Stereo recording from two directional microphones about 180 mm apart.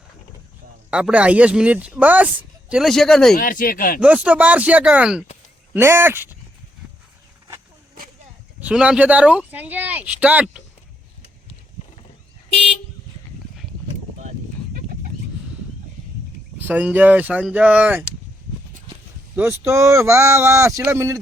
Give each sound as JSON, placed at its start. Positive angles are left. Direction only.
{"t": 0.9, "sound": "a man's voice", "side_deg": -5}
{"t": 3.3, "sound": "speech", "side_deg": 50}
{"t": 4.0, "sound": "a man's voice", "side_deg": -10}
{"t": 8.6, "sound": "a man's voice", "side_deg": -5}
{"t": 16.6, "sound": "a man's voice", "side_deg": -10}
{"t": 19.4, "sound": "a man's voice", "side_deg": -15}